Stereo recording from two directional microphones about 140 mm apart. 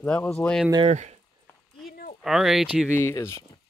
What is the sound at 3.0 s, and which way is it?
Speech, 20° left (ahead or behind).